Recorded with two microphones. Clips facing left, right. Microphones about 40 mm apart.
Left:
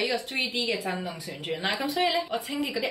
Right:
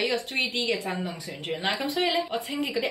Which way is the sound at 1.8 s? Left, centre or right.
Right.